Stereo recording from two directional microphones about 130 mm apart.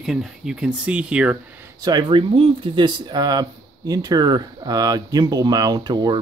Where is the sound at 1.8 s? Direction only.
35° right (ahead or behind).